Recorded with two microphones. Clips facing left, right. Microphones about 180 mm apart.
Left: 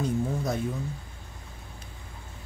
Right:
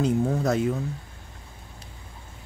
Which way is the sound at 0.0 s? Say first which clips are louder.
Right 5 dB; 75° right (ahead or behind).